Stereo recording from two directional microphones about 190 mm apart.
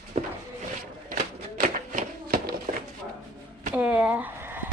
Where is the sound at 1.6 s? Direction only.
45° right (ahead or behind).